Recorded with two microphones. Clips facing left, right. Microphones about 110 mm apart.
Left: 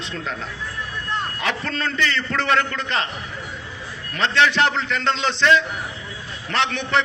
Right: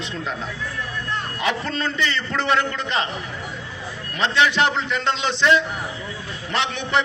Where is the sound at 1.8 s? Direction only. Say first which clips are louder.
Left 2 dB; 20° right (ahead or behind).